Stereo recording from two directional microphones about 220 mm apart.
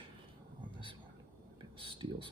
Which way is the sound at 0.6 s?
20° right (ahead or behind).